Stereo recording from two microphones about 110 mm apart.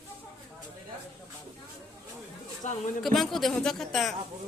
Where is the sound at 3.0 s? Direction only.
Centre (ahead or behind).